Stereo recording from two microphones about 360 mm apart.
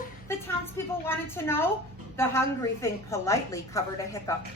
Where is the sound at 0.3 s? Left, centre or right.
Centre.